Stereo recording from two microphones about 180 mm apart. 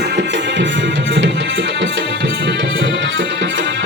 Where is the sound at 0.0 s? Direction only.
70° right (ahead or behind).